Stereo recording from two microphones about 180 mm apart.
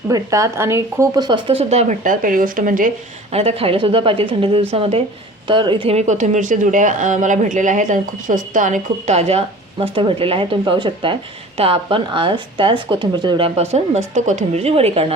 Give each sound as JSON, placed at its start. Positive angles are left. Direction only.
{"t": 0.1, "sound": "speech", "side_deg": -20}
{"t": 3.3, "sound": "a woman's voice", "side_deg": -35}
{"t": 13.6, "sound": "speech", "side_deg": -40}